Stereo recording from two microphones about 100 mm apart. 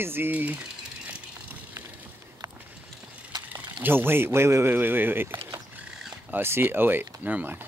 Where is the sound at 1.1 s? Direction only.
15° right (ahead or behind).